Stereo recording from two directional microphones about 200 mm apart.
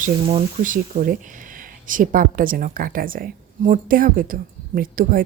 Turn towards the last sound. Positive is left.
turn(degrees=-45)  # may be behind; listen again after turning